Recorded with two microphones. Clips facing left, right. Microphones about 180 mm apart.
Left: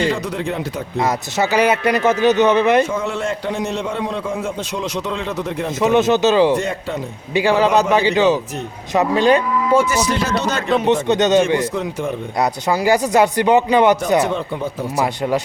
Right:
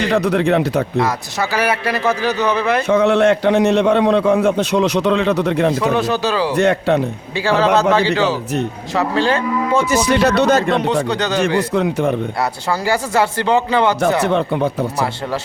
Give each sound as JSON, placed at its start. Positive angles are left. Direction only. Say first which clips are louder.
{"t": 0.1, "sound": "a man's voice", "louder": "right 7 dB", "side_deg": -70}
{"t": 1.0, "sound": "speech", "louder": "left 1 dB", "side_deg": 20}
{"t": 2.9, "sound": "a man's voice", "louder": "right 9 dB", "side_deg": -70}
{"t": 5.8, "sound": "speech", "louder": "left 3 dB", "side_deg": 20}
{"t": 6.6, "sound": "a man's voice", "louder": "right 9 dB", "side_deg": -70}
{"t": 7.3, "sound": "a man's voice", "louder": "left 1 dB", "side_deg": 15}
{"t": 10.1, "sound": "speech", "louder": "right 6 dB", "side_deg": -65}
{"t": 10.8, "sound": "speech", "louder": "left 3 dB", "side_deg": 20}
{"t": 11.7, "sound": "speech", "louder": "right 6 dB", "side_deg": -65}
{"t": 12.4, "sound": "a man's voice", "louder": "left 2 dB", "side_deg": 15}
{"t": 14.3, "sound": "a man's voice", "louder": "right 5 dB", "side_deg": -65}